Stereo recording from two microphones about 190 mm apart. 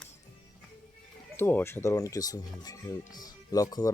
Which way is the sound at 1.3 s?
10° left (ahead or behind).